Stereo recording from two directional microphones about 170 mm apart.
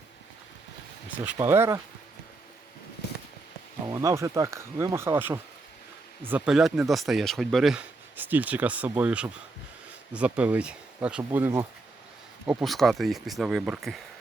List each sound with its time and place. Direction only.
1.2 s speech: 15° right (ahead or behind)
3.8 s speech: 20° right (ahead or behind)